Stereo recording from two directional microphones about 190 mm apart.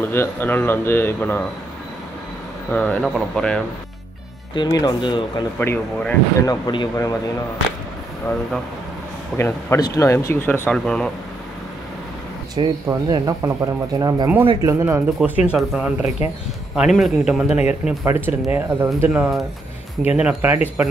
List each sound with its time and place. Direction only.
0.0 s speech: 10° left (ahead or behind)
2.7 s speech: 5° left (ahead or behind)
4.6 s speech: 20° left (ahead or behind)
5.6 s speech: 10° left (ahead or behind)
9.4 s speech: 15° left (ahead or behind)
12.5 s speech: 20° right (ahead or behind)
14.7 s speech: 15° right (ahead or behind)